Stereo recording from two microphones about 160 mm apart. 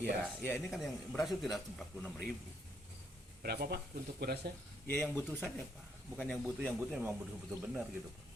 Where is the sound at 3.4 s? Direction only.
75° right (ahead or behind).